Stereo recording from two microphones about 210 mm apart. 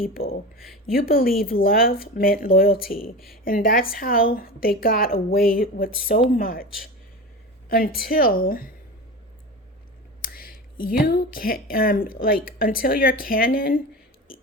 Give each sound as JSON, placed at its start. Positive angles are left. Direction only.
{"t": 0.0, "sound": "speech", "side_deg": 45}
{"t": 7.7, "sound": "speech", "side_deg": 45}
{"t": 10.2, "sound": "speech", "side_deg": 45}